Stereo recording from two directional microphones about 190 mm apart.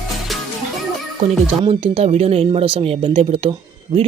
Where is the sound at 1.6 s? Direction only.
30° right (ahead or behind).